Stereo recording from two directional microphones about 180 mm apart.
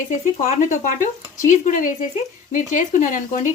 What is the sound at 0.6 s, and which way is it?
Speech, 45° left (ahead or behind).